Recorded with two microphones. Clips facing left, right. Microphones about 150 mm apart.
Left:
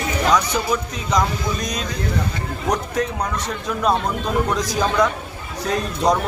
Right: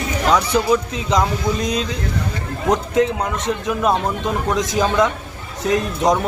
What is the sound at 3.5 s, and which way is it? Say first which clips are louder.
A man's voice: right 3 dB; 20° right (ahead or behind).